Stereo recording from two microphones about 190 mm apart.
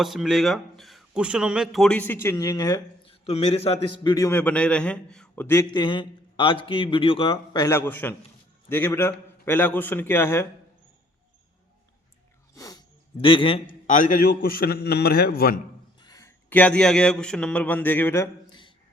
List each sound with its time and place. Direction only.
0.0 s speech: centre (ahead or behind)
5.7 s a man's voice: 25° left (ahead or behind)
12.5 s a sound: 20° left (ahead or behind)
13.8 s a man's voice: 40° left (ahead or behind)
16.0 s speech: 20° left (ahead or behind)